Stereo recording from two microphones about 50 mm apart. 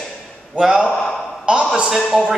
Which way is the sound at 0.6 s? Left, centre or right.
Centre.